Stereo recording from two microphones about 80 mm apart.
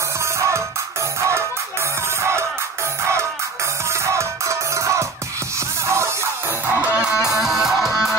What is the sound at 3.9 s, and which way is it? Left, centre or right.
Music, right.